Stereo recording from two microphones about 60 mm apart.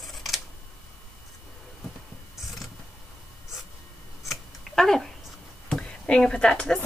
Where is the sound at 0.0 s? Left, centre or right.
Centre.